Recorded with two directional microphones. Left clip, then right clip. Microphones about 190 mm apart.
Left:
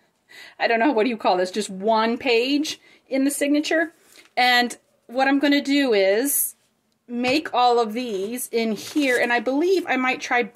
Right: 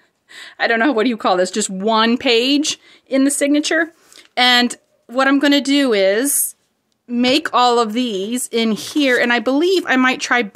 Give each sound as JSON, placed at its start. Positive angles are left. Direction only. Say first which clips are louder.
{"t": 0.3, "sound": "speech", "louder": "right 4 dB", "side_deg": -25}